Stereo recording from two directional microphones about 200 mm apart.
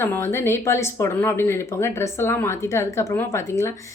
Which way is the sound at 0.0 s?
10° left (ahead or behind).